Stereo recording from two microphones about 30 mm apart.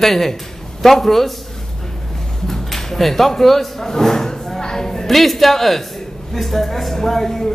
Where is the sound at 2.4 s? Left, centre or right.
Centre.